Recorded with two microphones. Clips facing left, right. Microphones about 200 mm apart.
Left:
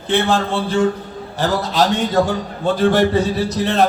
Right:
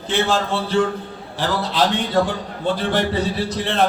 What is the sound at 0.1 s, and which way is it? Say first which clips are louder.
Speech: left 3 dB; 55° left (ahead or behind).